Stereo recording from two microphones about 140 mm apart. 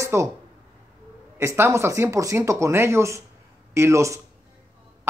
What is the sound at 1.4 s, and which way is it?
Speech, 20° right (ahead or behind).